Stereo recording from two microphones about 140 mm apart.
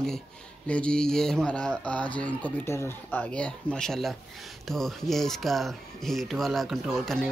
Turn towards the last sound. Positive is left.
turn(degrees=0)  # may be behind; listen again after turning